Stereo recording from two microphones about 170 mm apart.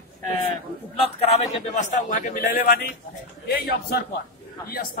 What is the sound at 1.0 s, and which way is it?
A man's voice, 40° left (ahead or behind).